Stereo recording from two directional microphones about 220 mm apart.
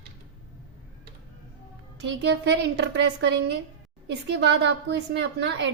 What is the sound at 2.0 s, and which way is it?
Speech, 50° right (ahead or behind).